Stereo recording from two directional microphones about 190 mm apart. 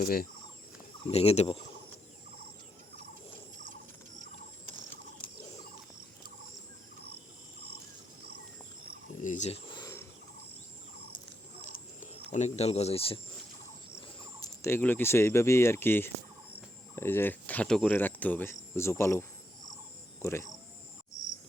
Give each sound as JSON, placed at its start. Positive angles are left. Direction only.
{"t": 0.0, "sound": "fowl", "side_deg": 50}
{"t": 1.1, "sound": "speech", "side_deg": 30}
{"t": 9.2, "sound": "snake", "side_deg": 40}
{"t": 11.6, "sound": "a sound", "side_deg": 45}
{"t": 12.3, "sound": "speech", "side_deg": 35}
{"t": 14.4, "sound": "speech", "side_deg": 15}
{"t": 20.2, "sound": "speech", "side_deg": 15}